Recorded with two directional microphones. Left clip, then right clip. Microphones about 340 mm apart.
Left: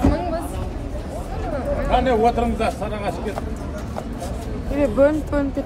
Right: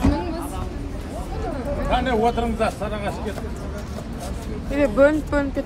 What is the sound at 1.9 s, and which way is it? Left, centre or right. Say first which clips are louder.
Speech: left 3 dB; right.